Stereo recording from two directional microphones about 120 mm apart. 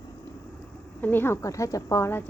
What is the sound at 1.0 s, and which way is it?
Speech, 20° left (ahead or behind).